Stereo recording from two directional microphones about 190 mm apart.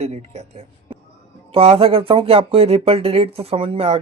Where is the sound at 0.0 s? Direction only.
35° right (ahead or behind).